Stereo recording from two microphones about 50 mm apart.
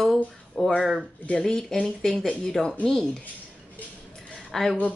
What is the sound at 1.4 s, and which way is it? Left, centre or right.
Speech, centre.